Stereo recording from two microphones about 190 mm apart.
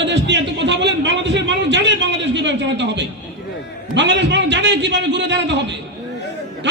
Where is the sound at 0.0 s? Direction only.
70° right (ahead or behind).